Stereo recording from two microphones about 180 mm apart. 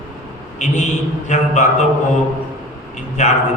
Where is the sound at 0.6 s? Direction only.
40° left (ahead or behind).